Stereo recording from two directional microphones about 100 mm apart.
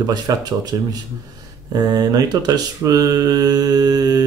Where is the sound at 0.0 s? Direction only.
40° right (ahead or behind).